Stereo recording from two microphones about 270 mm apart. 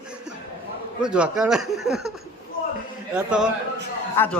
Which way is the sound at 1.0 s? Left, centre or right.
Centre.